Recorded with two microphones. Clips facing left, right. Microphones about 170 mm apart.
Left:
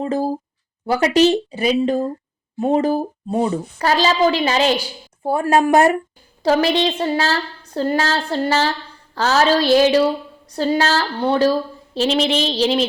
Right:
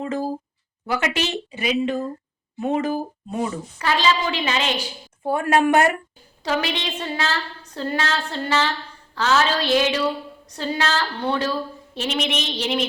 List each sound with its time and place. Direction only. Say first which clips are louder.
0.0 s a woman's voice: left 5 dB; 35° left (ahead or behind)